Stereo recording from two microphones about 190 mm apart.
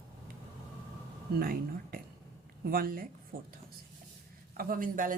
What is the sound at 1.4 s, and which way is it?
Speech, 50° right (ahead or behind).